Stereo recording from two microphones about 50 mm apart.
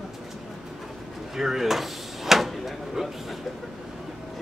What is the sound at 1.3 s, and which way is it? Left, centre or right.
A man's voice, centre.